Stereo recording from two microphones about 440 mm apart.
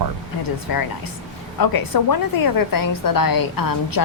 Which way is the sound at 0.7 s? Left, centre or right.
Left.